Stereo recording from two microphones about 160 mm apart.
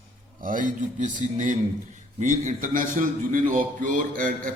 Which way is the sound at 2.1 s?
50° right (ahead or behind).